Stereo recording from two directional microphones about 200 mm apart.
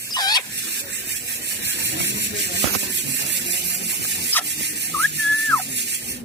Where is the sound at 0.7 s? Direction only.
60° right (ahead or behind).